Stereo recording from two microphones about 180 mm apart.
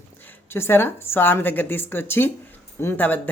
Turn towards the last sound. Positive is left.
turn(degrees=10)  # may be behind; listen again after turning